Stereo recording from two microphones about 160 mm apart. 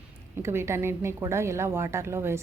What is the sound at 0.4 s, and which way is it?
A woman's voice, 15° right (ahead or behind).